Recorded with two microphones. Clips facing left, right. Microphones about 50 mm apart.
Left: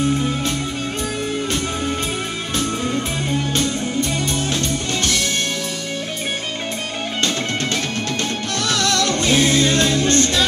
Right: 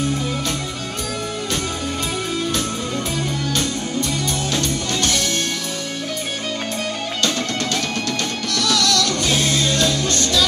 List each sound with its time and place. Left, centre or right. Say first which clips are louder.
3.3 s music: left 2 dB; left
8.5 s music: right 1 dB; left